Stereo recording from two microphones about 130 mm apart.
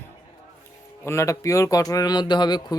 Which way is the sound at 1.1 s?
25° left (ahead or behind).